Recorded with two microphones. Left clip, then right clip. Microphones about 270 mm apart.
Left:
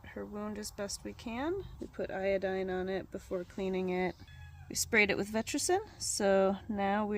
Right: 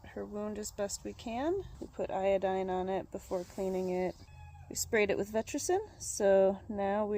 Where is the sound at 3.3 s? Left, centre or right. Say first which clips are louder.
Right 1 dB; left.